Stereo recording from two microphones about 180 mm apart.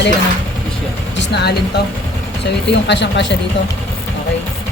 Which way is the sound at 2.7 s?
75° left (ahead or behind).